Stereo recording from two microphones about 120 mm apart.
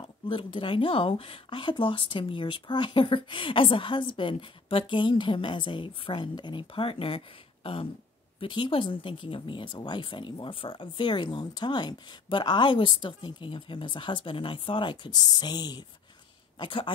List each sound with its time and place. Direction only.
0.3 s speech: 45° left (ahead or behind)